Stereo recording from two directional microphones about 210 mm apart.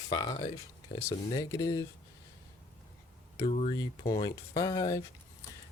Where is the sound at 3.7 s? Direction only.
20° left (ahead or behind).